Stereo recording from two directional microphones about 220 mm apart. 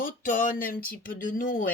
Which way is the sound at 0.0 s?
35° left (ahead or behind).